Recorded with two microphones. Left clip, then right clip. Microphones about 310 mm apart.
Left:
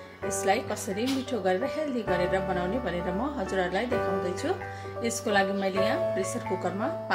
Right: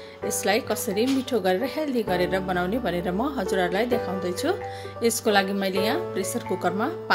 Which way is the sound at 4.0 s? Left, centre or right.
Centre.